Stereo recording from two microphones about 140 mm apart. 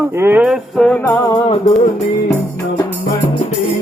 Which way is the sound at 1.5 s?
50° left (ahead or behind).